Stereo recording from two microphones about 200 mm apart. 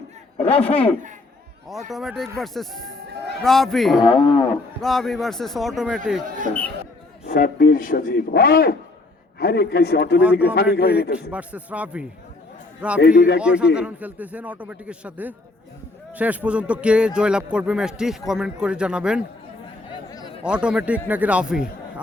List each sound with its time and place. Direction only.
0.3 s a man's voice: 30° left (ahead or behind)
1.9 s a man's voice: centre (ahead or behind)
4.0 s cattle: 20° left (ahead or behind)
4.8 s a man's voice: centre (ahead or behind)
7.3 s a man's voice: 45° left (ahead or behind)
10.2 s speech: 5° right (ahead or behind)
10.5 s a man's voice: 55° left (ahead or behind)
11.3 s speech: 5° right (ahead or behind)
13.0 s a man's voice: 55° left (ahead or behind)
13.4 s a man's voice: 5° right (ahead or behind)
19.9 s chatter: 20° left (ahead or behind)
20.4 s a man's voice: 5° right (ahead or behind)